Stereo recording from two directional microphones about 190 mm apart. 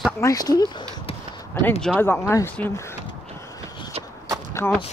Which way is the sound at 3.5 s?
20° left (ahead or behind).